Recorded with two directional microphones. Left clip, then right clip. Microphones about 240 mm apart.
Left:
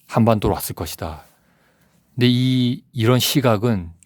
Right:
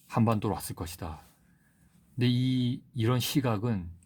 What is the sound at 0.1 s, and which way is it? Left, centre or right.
Speech, left.